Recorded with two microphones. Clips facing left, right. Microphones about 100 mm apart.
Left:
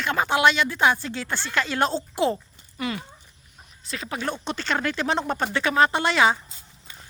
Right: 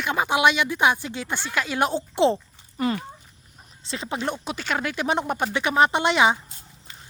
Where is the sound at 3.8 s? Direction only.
25° right (ahead or behind).